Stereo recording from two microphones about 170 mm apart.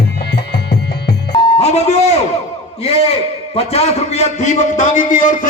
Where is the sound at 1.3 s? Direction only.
30° left (ahead or behind).